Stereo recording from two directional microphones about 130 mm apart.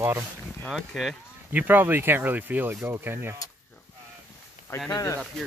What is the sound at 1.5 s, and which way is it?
Speech, 15° right (ahead or behind).